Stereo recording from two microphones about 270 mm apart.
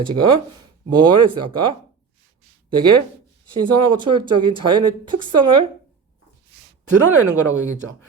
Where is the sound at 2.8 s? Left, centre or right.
Centre.